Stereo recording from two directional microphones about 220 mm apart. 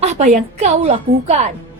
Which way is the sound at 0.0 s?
30° right (ahead or behind).